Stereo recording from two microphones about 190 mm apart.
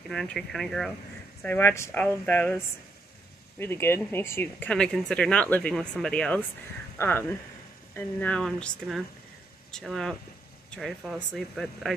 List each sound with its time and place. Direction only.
0.1 s speech: centre (ahead or behind)